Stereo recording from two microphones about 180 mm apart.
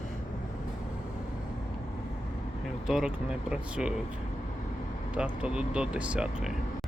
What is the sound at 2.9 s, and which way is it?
Speech, 5° right (ahead or behind).